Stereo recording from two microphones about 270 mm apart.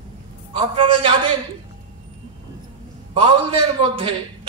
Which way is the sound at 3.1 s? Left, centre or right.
Centre.